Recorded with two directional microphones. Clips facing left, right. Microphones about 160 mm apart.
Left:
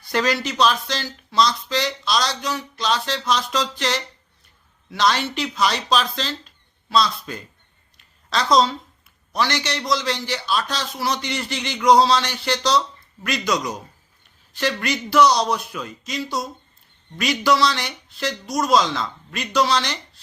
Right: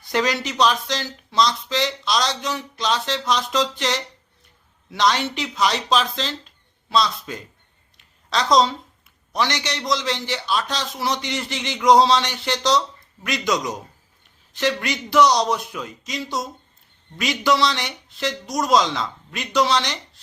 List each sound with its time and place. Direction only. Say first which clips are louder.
0.1 s speech: even; 20° right (ahead or behind)
7.9 s a sound: even; 20° right (ahead or behind)
9.3 s speech: left 1 dB; 20° right (ahead or behind)